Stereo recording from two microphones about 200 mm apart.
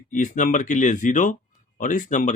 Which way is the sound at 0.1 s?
40° left (ahead or behind).